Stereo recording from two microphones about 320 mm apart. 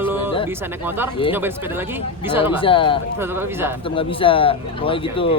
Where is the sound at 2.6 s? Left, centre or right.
Centre.